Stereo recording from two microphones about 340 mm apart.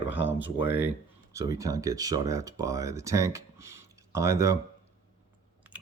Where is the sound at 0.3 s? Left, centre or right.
Left.